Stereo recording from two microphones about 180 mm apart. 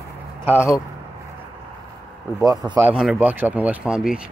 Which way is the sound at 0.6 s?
15° left (ahead or behind).